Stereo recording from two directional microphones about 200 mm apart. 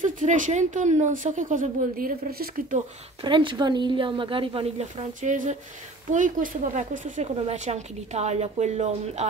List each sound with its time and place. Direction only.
0.0 s a woman's voice: 40° right (ahead or behind)
3.3 s a woman's voice: 25° right (ahead or behind)